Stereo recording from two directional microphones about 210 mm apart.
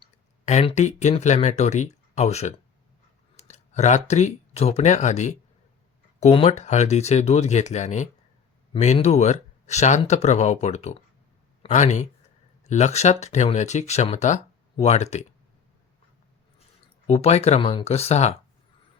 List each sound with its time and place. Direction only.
0.0 s speech: 30° left (ahead or behind)
17.1 s speech: 30° left (ahead or behind)